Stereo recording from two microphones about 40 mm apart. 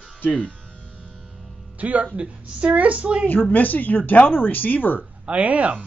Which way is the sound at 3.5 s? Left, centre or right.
Left.